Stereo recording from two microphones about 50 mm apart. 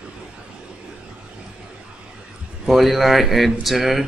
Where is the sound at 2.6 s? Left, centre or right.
Centre.